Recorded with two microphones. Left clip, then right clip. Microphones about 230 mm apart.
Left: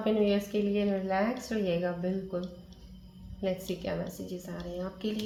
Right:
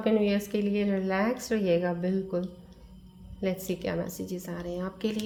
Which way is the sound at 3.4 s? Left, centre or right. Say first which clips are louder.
Right 2 dB; right.